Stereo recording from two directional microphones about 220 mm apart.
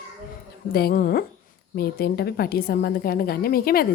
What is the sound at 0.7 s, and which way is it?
A woman's voice, 45° left (ahead or behind).